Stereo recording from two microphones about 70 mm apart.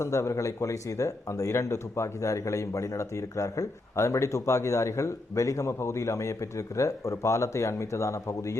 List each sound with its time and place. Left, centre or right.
0.0 s speech: left